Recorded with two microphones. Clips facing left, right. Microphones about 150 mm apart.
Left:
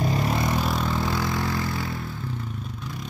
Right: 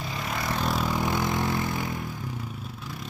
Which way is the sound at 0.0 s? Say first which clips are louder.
Left 8 dB; 40° left (ahead or behind).